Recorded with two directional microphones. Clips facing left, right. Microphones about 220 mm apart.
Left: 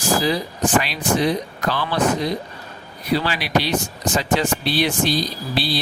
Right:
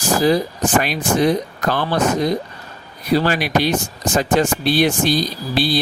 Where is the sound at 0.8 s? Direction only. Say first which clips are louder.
Right 5 dB; 50° right (ahead or behind).